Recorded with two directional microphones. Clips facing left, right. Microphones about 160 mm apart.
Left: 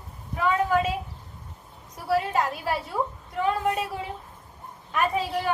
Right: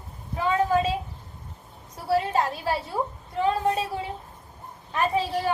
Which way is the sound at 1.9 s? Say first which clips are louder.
Right 1 dB; 30° right (ahead or behind).